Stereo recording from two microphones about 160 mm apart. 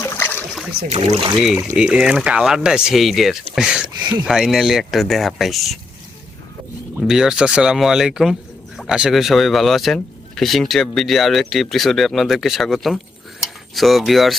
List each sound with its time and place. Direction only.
0.0 s boat: 15° left (ahead or behind)
0.9 s speech: 40° right (ahead or behind)
1.7 s speech: 5° right (ahead or behind)
7.0 s speech: 5° right (ahead or behind)